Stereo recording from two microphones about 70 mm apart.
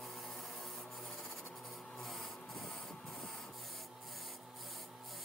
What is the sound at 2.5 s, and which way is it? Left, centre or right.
Printer, centre.